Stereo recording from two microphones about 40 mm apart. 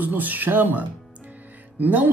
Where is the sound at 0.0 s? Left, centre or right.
Right.